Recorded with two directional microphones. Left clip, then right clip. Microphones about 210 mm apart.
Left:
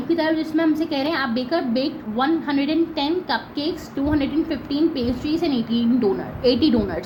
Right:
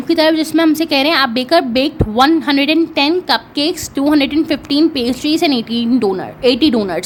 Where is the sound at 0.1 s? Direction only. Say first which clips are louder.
Right 9 dB; 50° right (ahead or behind).